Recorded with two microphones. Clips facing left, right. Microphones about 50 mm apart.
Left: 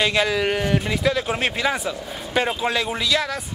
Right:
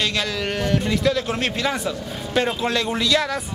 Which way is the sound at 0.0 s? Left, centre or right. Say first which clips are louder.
Left 4 dB; centre.